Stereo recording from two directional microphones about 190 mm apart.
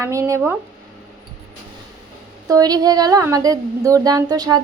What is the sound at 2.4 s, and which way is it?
Speech, 20° right (ahead or behind).